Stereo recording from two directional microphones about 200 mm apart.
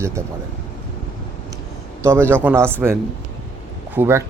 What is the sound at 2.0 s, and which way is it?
Speech, 15° right (ahead or behind).